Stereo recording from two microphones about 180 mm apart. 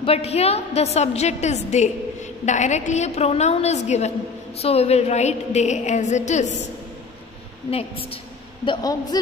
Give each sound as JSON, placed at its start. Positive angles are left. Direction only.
{"t": 0.0, "sound": "a woman's voice", "side_deg": 35}
{"t": 8.6, "sound": "a woman's voice", "side_deg": 20}